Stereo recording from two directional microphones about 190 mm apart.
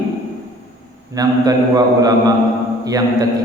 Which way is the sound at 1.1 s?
20° right (ahead or behind).